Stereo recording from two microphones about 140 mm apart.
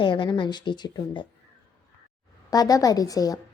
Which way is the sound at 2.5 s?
25° left (ahead or behind).